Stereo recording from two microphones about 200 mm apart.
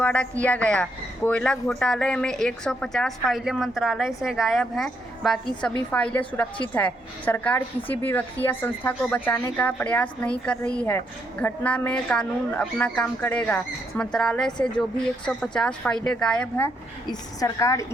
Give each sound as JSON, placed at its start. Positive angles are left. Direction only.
{"t": 0.0, "sound": "a woman's voice", "side_deg": 5}
{"t": 17.1, "sound": "a woman's voice", "side_deg": 15}